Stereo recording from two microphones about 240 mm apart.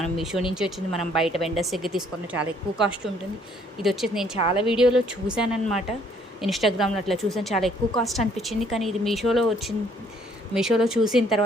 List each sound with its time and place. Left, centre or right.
0.0 s a woman's voice: centre
4.4 s a woman's voice: left
4.7 s a woman's voice: centre